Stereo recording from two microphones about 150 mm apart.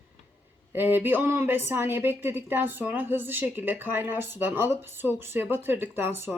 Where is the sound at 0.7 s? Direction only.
15° right (ahead or behind).